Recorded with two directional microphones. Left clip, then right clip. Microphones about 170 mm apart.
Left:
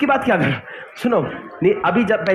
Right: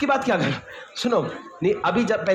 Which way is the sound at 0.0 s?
40° left (ahead or behind).